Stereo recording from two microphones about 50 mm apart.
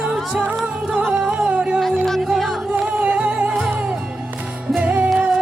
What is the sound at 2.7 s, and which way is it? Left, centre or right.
Music, right.